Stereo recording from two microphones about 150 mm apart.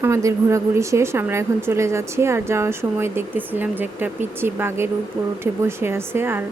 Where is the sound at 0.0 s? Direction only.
20° right (ahead or behind).